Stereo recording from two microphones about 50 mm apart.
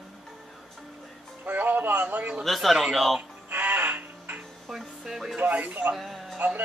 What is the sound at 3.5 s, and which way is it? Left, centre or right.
Music, right.